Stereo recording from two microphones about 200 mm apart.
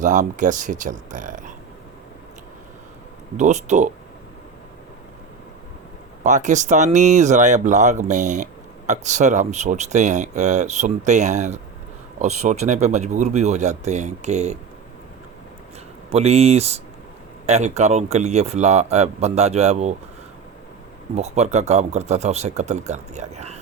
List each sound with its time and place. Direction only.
0.0 s speech: 40° right (ahead or behind)
3.3 s speech: 35° right (ahead or behind)
6.2 s speech: 40° right (ahead or behind)
16.1 s speech: 30° right (ahead or behind)
21.2 s speech: 35° right (ahead or behind)